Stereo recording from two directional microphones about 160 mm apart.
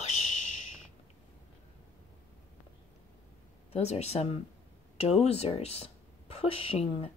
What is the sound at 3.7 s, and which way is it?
Speech, 40° left (ahead or behind).